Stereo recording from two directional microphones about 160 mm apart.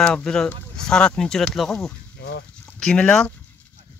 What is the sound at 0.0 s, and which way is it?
Speech, 5° left (ahead or behind).